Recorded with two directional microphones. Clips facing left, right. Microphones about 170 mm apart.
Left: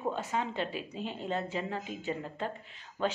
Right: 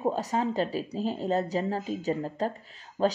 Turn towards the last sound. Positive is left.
turn(degrees=-35)  # may be behind; listen again after turning